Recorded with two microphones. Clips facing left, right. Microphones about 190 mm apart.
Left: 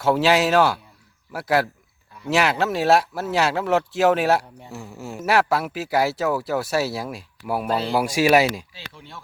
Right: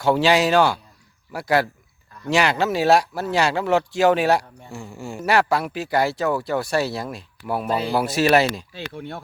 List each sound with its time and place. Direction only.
0.0 s speech: centre (ahead or behind)
7.7 s speech: 5° right (ahead or behind)
7.9 s speech: 10° left (ahead or behind)
8.7 s speech: 55° right (ahead or behind)